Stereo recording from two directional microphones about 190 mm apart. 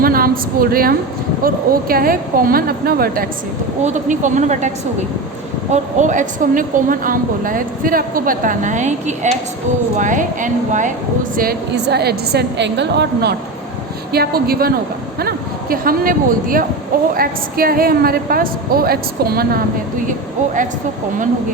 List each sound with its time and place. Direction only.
0.0 s a woman's voice: 50° right (ahead or behind)
3.8 s a woman's voice: 40° right (ahead or behind)
5.7 s a woman's voice: 40° right (ahead or behind)
11.3 s a woman's voice: 55° right (ahead or behind)
15.7 s a woman's voice: 50° right (ahead or behind)